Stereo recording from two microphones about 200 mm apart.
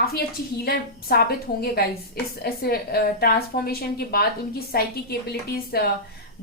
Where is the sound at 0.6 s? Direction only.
50° left (ahead or behind).